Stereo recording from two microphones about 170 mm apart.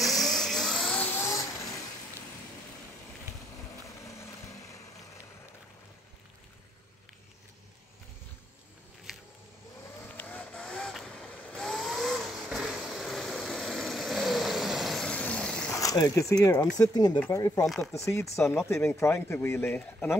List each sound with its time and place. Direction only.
0.0 s vehicle: centre (ahead or behind)
3.8 s vehicle: 20° left (ahead or behind)
10.0 s vehicle: 10° left (ahead or behind)
15.7 s speech: 20° left (ahead or behind)